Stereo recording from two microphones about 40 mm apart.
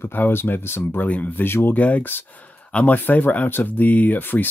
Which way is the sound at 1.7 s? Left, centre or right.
Left.